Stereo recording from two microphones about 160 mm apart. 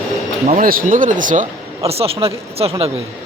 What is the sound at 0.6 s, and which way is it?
Speech, 60° right (ahead or behind).